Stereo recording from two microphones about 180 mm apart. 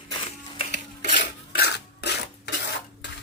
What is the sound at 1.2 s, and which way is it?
Filing, 65° left (ahead or behind).